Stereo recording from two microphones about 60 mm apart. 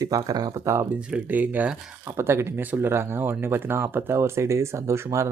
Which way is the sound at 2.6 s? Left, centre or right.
Right.